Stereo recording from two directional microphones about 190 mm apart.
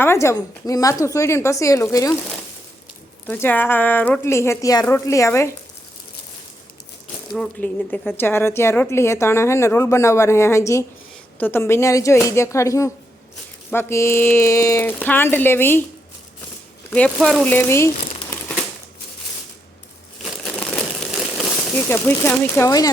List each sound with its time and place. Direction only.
0.0 s speech: 15° left (ahead or behind)
3.2 s speech: 10° left (ahead or behind)
7.3 s speech: 5° left (ahead or behind)
16.9 s speech: 5° left (ahead or behind)
20.2 s a sound: centre (ahead or behind)
21.8 s speech: 10° left (ahead or behind)